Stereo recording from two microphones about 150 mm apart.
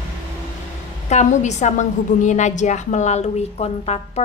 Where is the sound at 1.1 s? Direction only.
50° left (ahead or behind).